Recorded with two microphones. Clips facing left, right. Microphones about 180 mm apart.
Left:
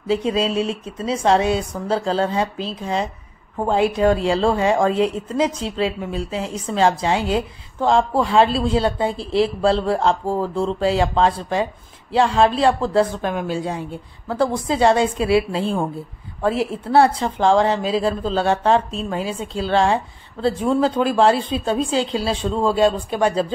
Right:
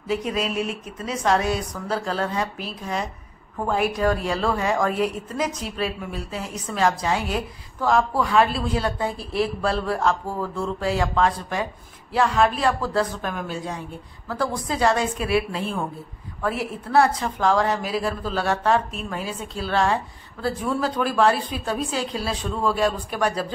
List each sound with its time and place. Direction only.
0.1 s speech: 30° left (ahead or behind)